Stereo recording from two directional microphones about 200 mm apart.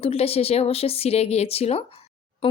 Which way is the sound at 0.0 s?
30° left (ahead or behind).